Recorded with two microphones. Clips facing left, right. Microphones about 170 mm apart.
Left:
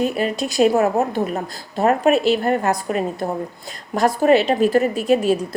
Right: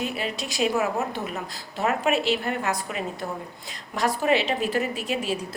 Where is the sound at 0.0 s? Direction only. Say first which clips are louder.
Left 9 dB; 45° left (ahead or behind).